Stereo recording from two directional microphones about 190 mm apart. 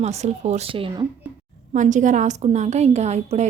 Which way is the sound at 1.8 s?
40° right (ahead or behind).